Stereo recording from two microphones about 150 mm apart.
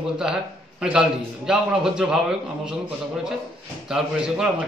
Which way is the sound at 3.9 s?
5° right (ahead or behind).